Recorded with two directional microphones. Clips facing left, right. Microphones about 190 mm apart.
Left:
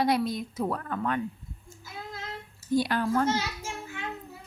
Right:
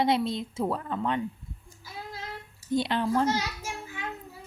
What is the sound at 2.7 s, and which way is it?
Speech, 25° right (ahead or behind).